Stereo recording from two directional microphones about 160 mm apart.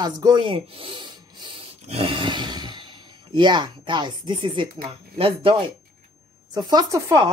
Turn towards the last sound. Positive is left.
turn(degrees=-20)  # may be behind; listen again after turning